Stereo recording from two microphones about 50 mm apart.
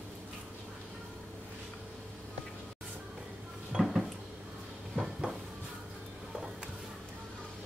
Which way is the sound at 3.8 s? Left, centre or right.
Centre.